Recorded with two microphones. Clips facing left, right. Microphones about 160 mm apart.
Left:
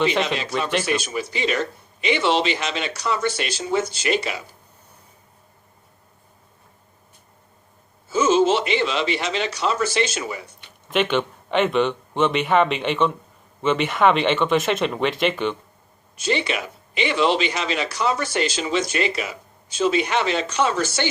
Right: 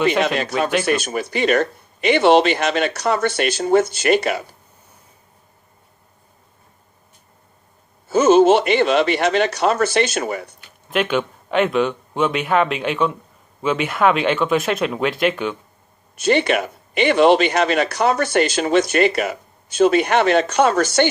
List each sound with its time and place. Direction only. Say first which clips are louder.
0.2 s speech: right 4 dB; 55° right (ahead or behind)
8.1 s speech: right 6 dB; 60° right (ahead or behind)
10.9 s speech: right 1 dB; centre (ahead or behind)
16.2 s speech: right 7 dB; 60° right (ahead or behind)